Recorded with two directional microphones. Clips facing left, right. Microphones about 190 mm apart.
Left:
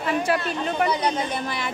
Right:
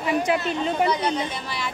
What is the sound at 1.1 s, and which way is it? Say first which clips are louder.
Speech: left 1 dB; 50° left (ahead or behind).